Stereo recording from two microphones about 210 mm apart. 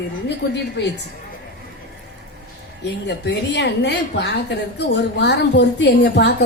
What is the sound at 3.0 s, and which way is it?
A woman's voice, 55° left (ahead or behind).